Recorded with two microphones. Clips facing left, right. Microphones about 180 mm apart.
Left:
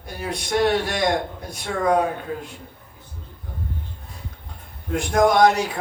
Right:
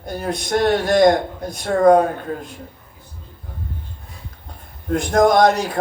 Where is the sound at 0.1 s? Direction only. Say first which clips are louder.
Right 4 dB; 40° right (ahead or behind).